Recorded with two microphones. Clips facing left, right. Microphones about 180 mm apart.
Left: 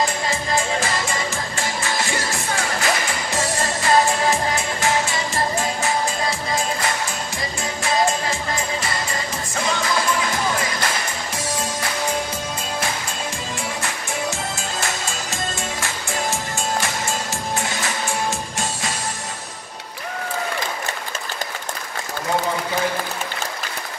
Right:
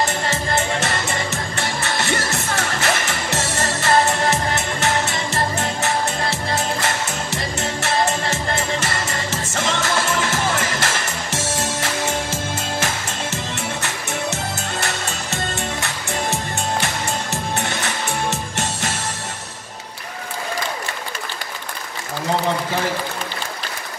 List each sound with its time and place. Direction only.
0.0 s music: 75° right (ahead or behind)
7.3 s music: 70° right (ahead or behind)
13.8 s music: 70° right (ahead or behind)
17.6 s music: 65° right (ahead or behind)